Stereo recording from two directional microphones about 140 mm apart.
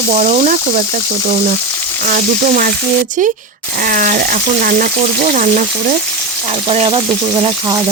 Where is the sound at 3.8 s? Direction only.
75° right (ahead or behind).